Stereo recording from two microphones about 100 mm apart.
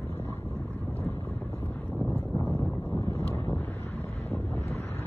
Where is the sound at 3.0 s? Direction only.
25° left (ahead or behind).